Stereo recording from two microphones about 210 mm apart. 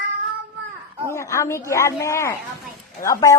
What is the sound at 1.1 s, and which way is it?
Speech, 15° left (ahead or behind).